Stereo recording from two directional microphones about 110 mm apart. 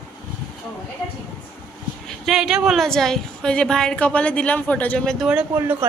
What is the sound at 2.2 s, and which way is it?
A woman's voice, 5° right (ahead or behind).